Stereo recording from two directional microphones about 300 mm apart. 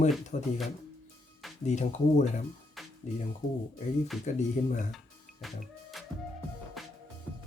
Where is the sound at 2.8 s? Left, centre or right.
Centre.